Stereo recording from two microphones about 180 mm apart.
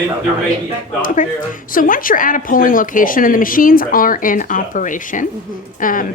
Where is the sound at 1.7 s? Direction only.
50° left (ahead or behind).